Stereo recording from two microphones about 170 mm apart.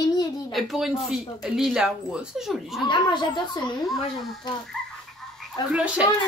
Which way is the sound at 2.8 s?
25° left (ahead or behind).